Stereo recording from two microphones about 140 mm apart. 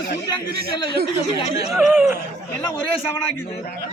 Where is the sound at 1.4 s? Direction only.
45° left (ahead or behind).